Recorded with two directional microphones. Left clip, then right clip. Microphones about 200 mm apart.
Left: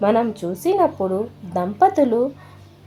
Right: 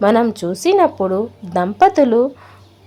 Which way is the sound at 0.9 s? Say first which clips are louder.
Right 4 dB; 30° right (ahead or behind).